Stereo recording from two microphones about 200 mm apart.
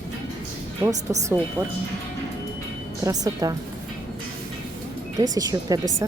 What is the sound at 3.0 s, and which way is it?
Speech, 20° right (ahead or behind).